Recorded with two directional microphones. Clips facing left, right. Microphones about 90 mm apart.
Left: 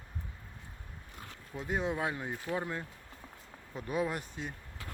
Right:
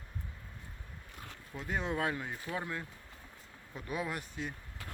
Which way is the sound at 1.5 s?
10° left (ahead or behind).